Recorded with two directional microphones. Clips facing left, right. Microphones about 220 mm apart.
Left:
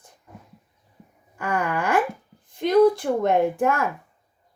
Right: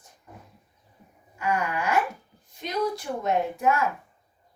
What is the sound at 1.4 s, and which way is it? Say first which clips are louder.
Speech: left 2 dB; 50° left (ahead or behind).